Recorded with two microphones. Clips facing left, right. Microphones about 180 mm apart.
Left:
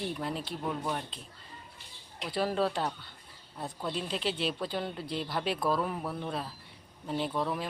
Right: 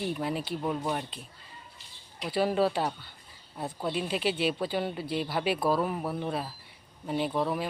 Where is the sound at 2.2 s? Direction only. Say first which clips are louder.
Right 4 dB; 5° right (ahead or behind).